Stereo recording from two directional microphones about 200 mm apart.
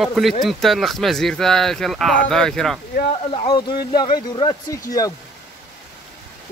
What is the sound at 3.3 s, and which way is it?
Speech, 25° left (ahead or behind).